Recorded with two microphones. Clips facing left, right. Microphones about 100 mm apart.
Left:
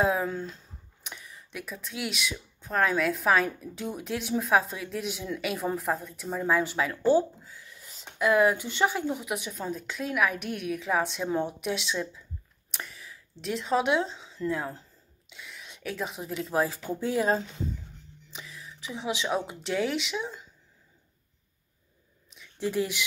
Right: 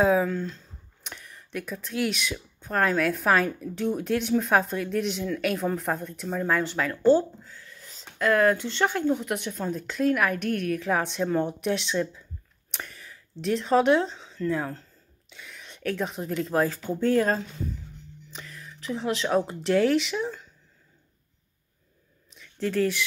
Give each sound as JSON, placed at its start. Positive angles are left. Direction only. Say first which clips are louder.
{"t": 0.0, "sound": "speech", "louder": "right 4 dB", "side_deg": 0}
{"t": 0.3, "sound": "speech", "louder": "right 4 dB", "side_deg": 10}
{"t": 12.7, "sound": "a sound", "louder": "right 1 dB", "side_deg": 0}
{"t": 15.2, "sound": "speech", "louder": "even", "side_deg": 0}
{"t": 22.6, "sound": "speech", "louder": "right 4 dB", "side_deg": 15}